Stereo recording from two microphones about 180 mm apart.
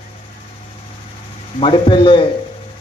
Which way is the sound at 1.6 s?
30° left (ahead or behind).